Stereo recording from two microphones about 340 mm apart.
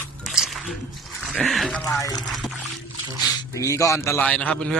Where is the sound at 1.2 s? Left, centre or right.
Centre.